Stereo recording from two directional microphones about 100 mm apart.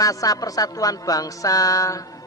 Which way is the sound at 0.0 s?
35° left (ahead or behind).